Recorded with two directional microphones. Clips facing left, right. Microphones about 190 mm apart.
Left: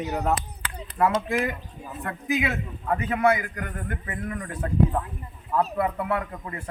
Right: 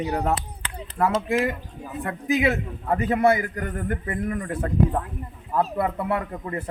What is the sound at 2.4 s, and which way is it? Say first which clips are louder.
A man's voice: right 5 dB; 35° right (ahead or behind).